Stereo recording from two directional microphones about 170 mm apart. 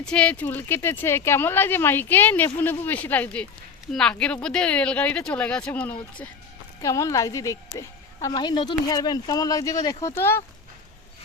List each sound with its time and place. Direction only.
0.0 s a woman's voice: 5° left (ahead or behind)